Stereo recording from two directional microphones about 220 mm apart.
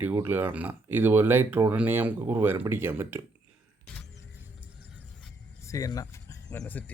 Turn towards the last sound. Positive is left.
turn(degrees=10)  # may be behind; listen again after turning